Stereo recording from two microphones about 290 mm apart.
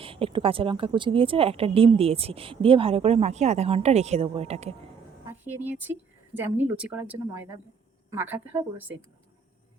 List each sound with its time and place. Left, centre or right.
0.0 s speech: centre
5.3 s a woman's voice: centre